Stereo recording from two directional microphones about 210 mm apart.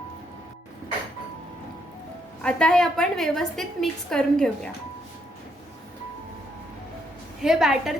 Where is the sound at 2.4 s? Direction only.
5° left (ahead or behind).